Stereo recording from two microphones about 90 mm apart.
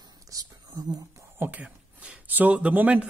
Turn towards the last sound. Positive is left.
turn(degrees=-15)  # may be behind; listen again after turning